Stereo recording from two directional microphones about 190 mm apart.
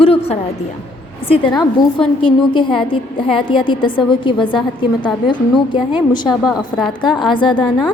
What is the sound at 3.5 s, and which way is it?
A woman's voice, 25° left (ahead or behind).